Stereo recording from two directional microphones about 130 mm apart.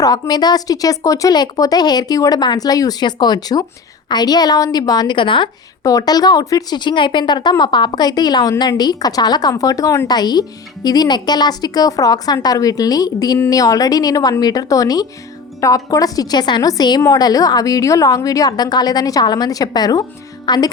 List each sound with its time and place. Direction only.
0.0 s a woman's voice: 30° left (ahead or behind)
5.8 s a woman's voice: 25° left (ahead or behind)